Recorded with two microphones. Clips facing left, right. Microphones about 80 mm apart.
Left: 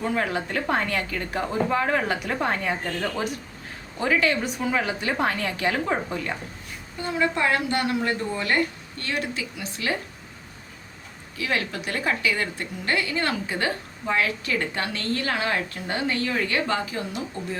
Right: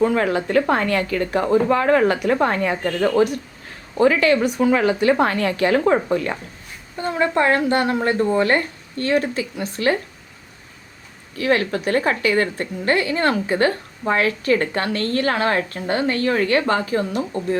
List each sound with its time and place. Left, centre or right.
0.1 s a woman's voice: right
3.9 s a woman's voice: right
7.0 s a woman's voice: right
11.3 s a woman's voice: right